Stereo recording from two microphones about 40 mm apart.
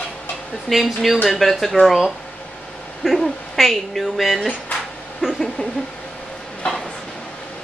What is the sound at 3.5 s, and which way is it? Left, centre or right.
Speech, centre.